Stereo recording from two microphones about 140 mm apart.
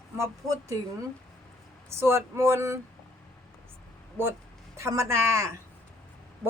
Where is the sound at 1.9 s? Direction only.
20° right (ahead or behind).